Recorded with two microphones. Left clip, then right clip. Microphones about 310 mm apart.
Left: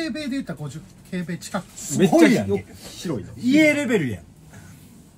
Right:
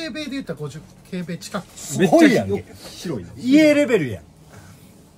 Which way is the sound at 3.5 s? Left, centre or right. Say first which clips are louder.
Right 3 dB; right.